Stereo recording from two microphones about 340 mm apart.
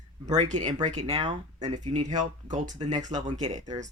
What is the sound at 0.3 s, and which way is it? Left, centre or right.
Speech, centre.